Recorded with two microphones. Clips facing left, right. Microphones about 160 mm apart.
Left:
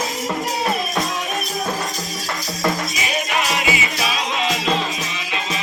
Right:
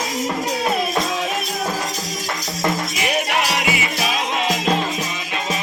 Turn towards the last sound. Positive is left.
turn(degrees=-55)  # may be behind; listen again after turning